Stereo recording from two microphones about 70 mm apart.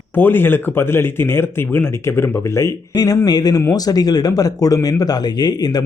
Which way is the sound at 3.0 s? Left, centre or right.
Left.